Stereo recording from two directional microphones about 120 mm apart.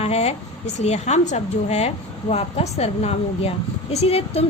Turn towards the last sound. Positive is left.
turn(degrees=60)  # may be behind; listen again after turning